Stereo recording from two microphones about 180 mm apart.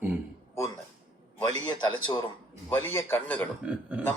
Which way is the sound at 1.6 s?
25° left (ahead or behind).